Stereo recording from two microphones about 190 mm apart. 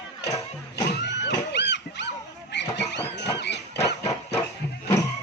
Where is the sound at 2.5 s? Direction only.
65° left (ahead or behind).